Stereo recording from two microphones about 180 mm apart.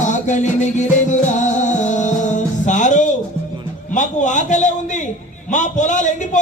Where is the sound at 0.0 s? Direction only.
45° left (ahead or behind).